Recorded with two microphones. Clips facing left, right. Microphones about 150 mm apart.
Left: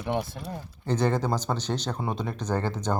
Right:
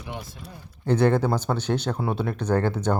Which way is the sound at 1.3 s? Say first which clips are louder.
Right 4 dB; 10° right (ahead or behind).